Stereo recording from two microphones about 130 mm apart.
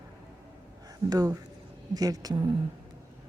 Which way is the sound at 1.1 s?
30° right (ahead or behind).